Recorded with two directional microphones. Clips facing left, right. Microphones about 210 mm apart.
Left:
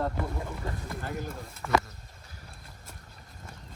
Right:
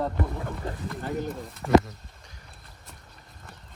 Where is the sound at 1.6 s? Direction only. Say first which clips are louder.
Right 8 dB; 30° right (ahead or behind).